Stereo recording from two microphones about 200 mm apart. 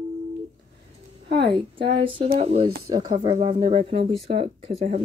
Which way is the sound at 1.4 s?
25° right (ahead or behind).